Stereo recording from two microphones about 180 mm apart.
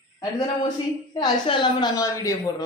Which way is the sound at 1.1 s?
25° left (ahead or behind).